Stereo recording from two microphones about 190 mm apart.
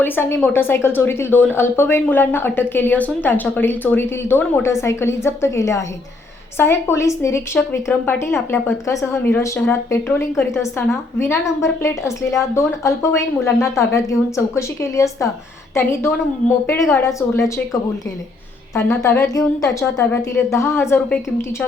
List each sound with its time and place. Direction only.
0.0 s a woman's voice: 10° left (ahead or behind)